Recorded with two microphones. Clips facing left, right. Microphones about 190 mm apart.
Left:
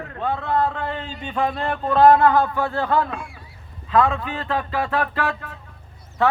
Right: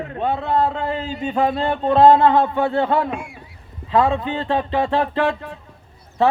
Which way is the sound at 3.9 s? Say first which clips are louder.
Right 2 dB; 30° right (ahead or behind).